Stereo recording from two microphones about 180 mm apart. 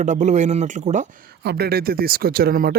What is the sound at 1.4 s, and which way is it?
Speech, 60° right (ahead or behind).